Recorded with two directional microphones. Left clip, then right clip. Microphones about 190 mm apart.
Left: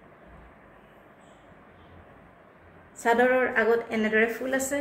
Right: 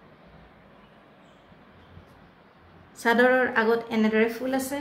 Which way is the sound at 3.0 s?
50° right (ahead or behind).